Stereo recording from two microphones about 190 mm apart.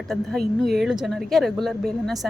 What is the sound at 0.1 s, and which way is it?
Speech, centre (ahead or behind).